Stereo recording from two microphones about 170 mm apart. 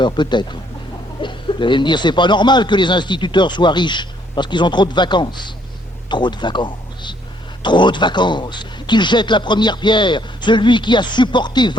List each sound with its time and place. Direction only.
0.0 s a man's voice: 25° left (ahead or behind)